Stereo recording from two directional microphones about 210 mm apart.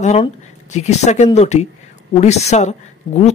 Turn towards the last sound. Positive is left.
turn(degrees=20)  # may be behind; listen again after turning